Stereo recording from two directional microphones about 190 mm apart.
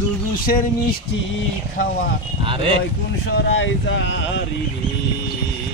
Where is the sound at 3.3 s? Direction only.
65° left (ahead or behind).